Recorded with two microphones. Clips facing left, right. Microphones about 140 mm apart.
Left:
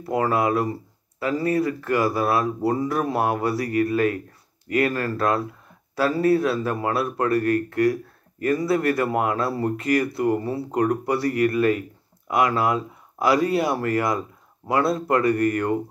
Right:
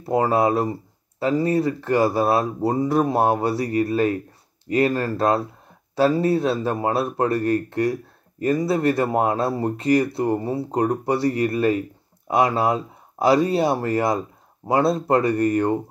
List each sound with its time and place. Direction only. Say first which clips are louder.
0.0 s speech: right 3 dB; 25° right (ahead or behind)